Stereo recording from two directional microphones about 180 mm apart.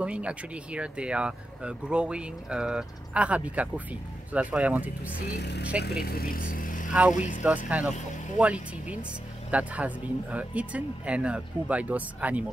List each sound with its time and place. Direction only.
0.0 s speech: 5° right (ahead or behind)
5.2 s speech: 65° left (ahead or behind); by 6.9 s 50° left (ahead or behind)
6.9 s speech: 5° right (ahead or behind)
7.2 s speech: 45° left (ahead or behind)
7.4 s speech: 10° right (ahead or behind)